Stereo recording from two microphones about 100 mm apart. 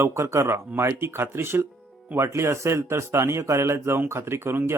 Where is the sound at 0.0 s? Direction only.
30° right (ahead or behind).